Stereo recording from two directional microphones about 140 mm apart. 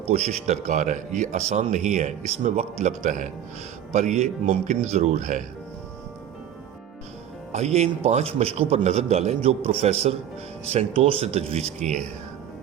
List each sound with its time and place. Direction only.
0.1 s speech: 50° right (ahead or behind)
7.5 s speech: 50° right (ahead or behind)